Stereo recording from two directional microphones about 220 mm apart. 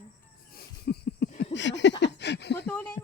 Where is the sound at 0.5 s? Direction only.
45° left (ahead or behind).